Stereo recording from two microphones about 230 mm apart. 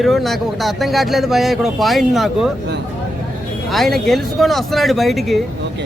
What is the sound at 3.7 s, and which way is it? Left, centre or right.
A man's voice, centre.